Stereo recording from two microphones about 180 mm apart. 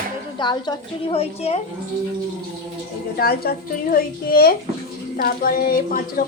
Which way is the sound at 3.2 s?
60° left (ahead or behind).